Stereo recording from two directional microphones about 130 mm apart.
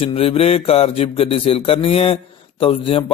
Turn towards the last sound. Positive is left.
turn(degrees=45)  # may be behind; listen again after turning